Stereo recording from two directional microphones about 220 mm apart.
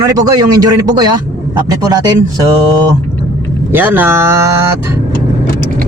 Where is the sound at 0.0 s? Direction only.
15° right (ahead or behind).